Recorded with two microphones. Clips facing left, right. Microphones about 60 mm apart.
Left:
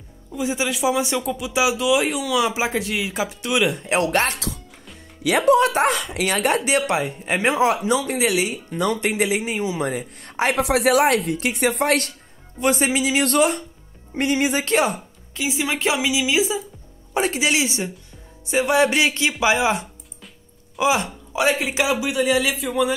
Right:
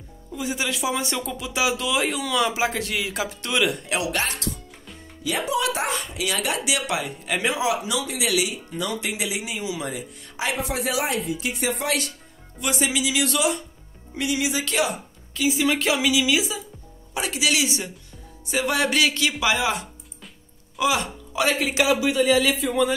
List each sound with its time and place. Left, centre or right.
0.3 s speech: centre
3.6 s speech: left
4.0 s speech: left
5.2 s speech: left
5.5 s speech: left
5.9 s speech: left
6.2 s speech: left
10.5 s speech: left
12.5 s a woman's voice: left
15.4 s speech: left
21.5 s speech: centre